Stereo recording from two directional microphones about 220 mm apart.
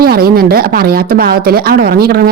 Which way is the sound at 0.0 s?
45° right (ahead or behind).